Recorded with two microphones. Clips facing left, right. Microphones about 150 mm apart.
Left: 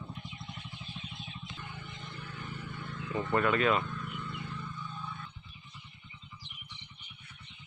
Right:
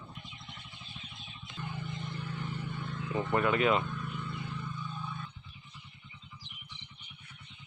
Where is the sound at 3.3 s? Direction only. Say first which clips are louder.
Even; 15° right (ahead or behind).